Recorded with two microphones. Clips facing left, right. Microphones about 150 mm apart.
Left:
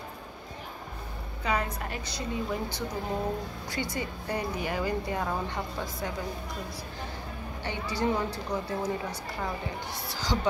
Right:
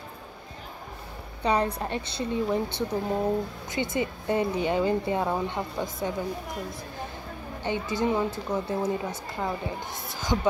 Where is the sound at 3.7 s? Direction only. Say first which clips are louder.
Right 5 dB; 20° right (ahead or behind).